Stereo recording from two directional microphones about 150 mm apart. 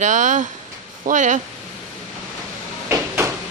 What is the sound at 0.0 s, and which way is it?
Speech, 55° right (ahead or behind).